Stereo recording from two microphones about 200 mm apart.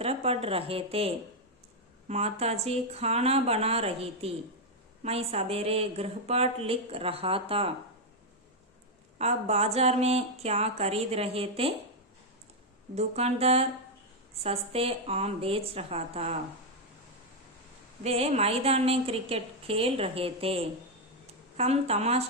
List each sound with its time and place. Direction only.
0.0 s a woman's voice: 30° right (ahead or behind)
9.1 s speech: 30° right (ahead or behind)
13.0 s speech: 30° right (ahead or behind)
18.0 s a woman's voice: 30° right (ahead or behind)